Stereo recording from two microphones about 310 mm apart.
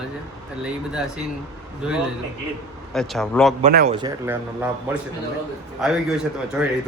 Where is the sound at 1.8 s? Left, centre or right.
Centre.